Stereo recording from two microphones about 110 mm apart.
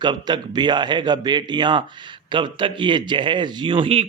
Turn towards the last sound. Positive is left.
turn(degrees=-55)  # may be behind; listen again after turning